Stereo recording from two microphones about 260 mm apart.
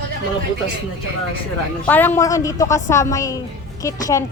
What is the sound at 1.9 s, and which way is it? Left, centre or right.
A woman's voice, centre.